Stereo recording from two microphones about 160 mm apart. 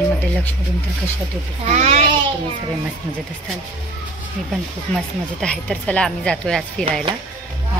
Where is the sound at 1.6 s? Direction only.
45° right (ahead or behind).